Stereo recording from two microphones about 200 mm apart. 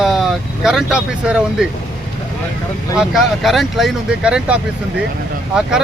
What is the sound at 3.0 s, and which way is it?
Speech, centre (ahead or behind).